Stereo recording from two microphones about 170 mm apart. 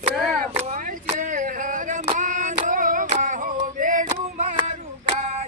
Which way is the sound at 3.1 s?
50° right (ahead or behind).